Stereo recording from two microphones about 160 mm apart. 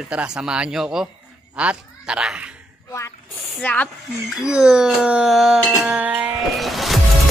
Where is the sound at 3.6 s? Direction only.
10° left (ahead or behind).